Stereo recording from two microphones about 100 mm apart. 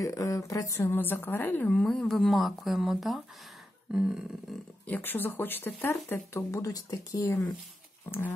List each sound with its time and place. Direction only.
0.0 s speech: 35° left (ahead or behind)
0.8 s speech: 20° left (ahead or behind)
1.8 s speech: 5° left (ahead or behind)
3.9 s a sound: 10° right (ahead or behind)
4.8 s speech: 20° left (ahead or behind)